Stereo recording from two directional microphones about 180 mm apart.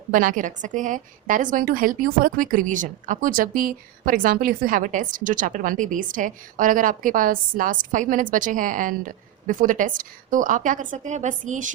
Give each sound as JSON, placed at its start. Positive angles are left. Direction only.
{"t": 0.1, "sound": "a woman's voice", "side_deg": -50}